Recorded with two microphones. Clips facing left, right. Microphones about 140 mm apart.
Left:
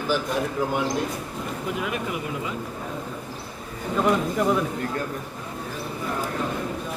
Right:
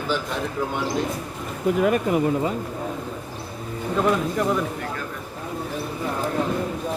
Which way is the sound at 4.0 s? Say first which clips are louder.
Even; 5° left (ahead or behind).